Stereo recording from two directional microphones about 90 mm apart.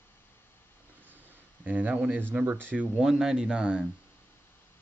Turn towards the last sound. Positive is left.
turn(degrees=-10)  # may be behind; listen again after turning